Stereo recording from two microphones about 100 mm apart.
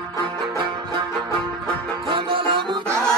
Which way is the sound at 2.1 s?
65° right (ahead or behind).